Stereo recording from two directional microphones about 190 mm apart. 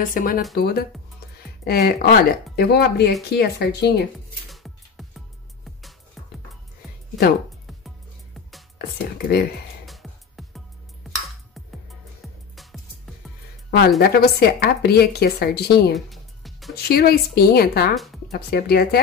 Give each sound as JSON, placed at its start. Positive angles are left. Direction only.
{"t": 0.0, "sound": "speech", "side_deg": 45}
{"t": 4.5, "sound": "music", "side_deg": 0}
{"t": 8.7, "sound": "speech", "side_deg": 55}
{"t": 9.8, "sound": "music", "side_deg": 0}
{"t": 12.5, "sound": "music", "side_deg": 0}
{"t": 13.7, "sound": "speech", "side_deg": 60}
{"t": 15.9, "sound": "music", "side_deg": 0}
{"t": 16.7, "sound": "speech", "side_deg": 55}
{"t": 17.9, "sound": "speech", "side_deg": 0}
{"t": 18.3, "sound": "speech", "side_deg": 55}